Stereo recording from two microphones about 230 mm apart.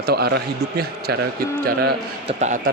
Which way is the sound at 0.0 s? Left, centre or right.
Right.